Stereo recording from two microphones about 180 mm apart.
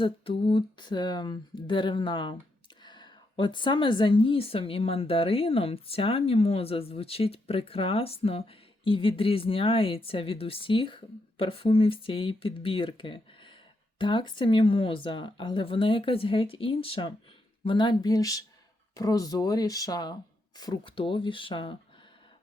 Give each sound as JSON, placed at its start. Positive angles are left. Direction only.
{"t": 0.0, "sound": "a woman's voice", "side_deg": 30}